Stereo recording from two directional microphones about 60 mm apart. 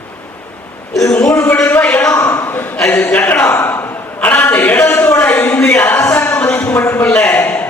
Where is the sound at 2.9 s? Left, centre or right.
Left.